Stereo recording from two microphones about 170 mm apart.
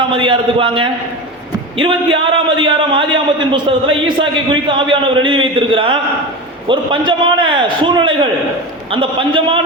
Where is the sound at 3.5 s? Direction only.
30° right (ahead or behind).